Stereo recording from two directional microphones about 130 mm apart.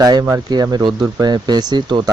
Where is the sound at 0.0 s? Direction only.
30° right (ahead or behind).